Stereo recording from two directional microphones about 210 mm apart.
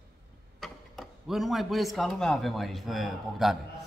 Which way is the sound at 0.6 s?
Centre (ahead or behind).